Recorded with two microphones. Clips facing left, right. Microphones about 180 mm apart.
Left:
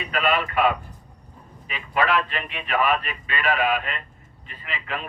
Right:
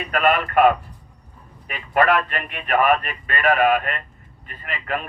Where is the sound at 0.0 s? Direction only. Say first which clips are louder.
Right 4 dB; 50° right (ahead or behind).